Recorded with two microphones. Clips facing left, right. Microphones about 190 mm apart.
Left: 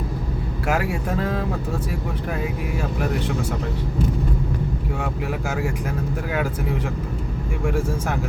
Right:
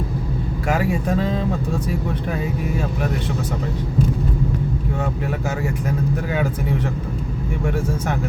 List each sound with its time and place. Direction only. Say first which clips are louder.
0.7 s a man's voice: right 3 dB; 5° left (ahead or behind)
7.6 s a man's voice: even; centre (ahead or behind)